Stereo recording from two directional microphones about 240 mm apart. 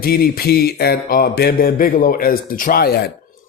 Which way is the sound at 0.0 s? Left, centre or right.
Left.